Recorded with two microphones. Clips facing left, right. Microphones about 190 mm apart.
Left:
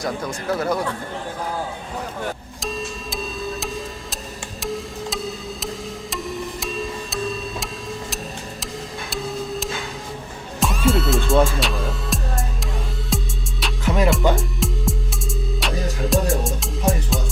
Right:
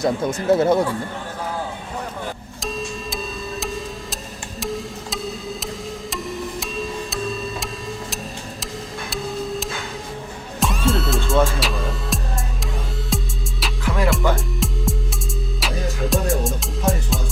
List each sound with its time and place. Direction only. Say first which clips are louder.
0.0 s speech: right 5 dB; 25° right (ahead or behind)
2.6 s music: right 1 dB; centre (ahead or behind)
13.8 s music: left 2 dB; 20° left (ahead or behind)
14.3 s music: left 1 dB; centre (ahead or behind)